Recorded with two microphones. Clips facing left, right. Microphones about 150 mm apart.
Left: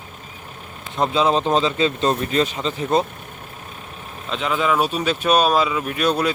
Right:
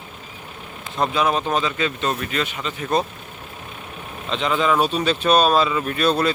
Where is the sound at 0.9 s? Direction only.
20° left (ahead or behind).